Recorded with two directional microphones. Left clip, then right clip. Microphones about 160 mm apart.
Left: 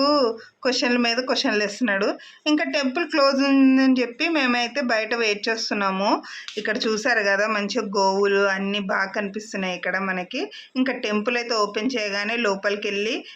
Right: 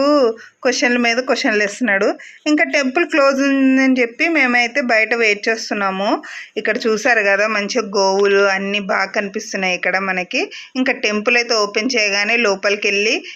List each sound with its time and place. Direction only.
0.0 s speech: 25° right (ahead or behind)
3.8 s speech: 20° right (ahead or behind)